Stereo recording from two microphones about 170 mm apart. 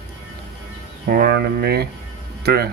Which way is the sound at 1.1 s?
70° right (ahead or behind).